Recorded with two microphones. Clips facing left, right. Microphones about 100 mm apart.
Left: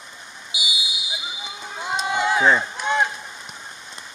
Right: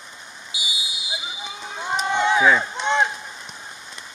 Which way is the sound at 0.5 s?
20° left (ahead or behind).